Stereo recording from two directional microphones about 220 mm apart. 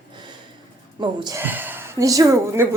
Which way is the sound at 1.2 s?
15° right (ahead or behind).